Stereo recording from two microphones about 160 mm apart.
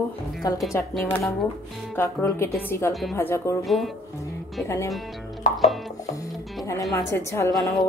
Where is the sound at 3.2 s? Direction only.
15° left (ahead or behind).